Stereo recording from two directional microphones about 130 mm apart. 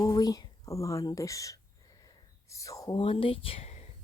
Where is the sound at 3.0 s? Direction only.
45° left (ahead or behind).